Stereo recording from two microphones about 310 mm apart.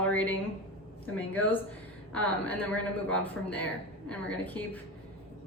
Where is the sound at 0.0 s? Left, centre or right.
Centre.